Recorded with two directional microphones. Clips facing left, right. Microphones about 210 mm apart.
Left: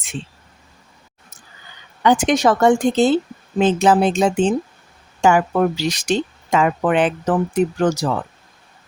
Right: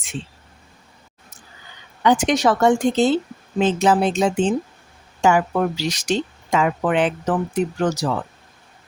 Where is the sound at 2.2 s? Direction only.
50° left (ahead or behind).